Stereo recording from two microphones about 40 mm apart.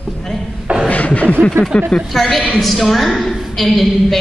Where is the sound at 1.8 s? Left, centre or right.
Centre.